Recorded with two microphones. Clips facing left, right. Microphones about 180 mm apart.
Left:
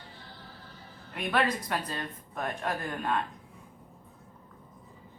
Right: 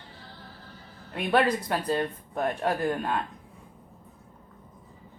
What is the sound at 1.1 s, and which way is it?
Speech, 30° right (ahead or behind).